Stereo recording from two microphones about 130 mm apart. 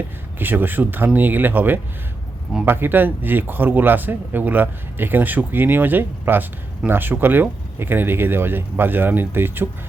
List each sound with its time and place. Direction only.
0.3 s speech: 15° right (ahead or behind)